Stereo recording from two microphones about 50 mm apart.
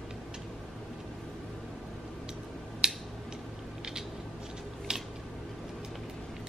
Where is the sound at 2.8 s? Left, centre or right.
Centre.